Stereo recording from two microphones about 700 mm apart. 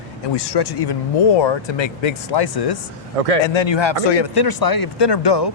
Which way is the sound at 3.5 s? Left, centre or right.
Left.